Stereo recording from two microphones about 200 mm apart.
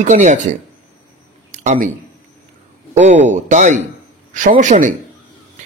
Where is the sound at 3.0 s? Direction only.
35° right (ahead or behind).